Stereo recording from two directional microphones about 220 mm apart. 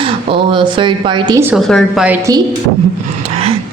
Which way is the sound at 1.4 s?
Centre (ahead or behind).